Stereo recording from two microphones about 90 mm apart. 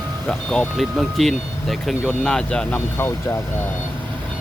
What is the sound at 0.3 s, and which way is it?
Speech, 10° left (ahead or behind).